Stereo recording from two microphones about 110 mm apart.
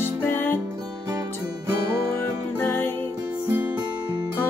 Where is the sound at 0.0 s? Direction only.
20° left (ahead or behind).